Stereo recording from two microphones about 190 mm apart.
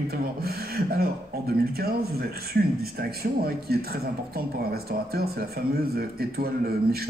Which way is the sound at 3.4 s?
55° right (ahead or behind).